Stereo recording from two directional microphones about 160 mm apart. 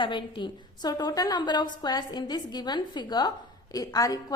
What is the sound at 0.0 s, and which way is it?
A woman's voice, 30° left (ahead or behind).